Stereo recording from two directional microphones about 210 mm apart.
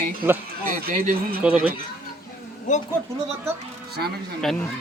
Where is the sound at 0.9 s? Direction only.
45° right (ahead or behind).